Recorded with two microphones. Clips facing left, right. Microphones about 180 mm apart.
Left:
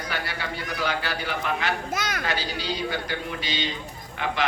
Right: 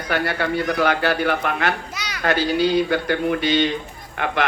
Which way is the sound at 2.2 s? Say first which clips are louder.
Right 11 dB; 55° right (ahead or behind).